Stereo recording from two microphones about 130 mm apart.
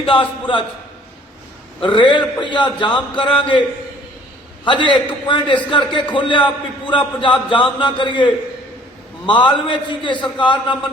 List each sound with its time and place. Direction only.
0.0 s a man's voice: 45° left (ahead or behind)
1.8 s a man's voice: 40° left (ahead or behind)
4.6 s a man's voice: 40° left (ahead or behind)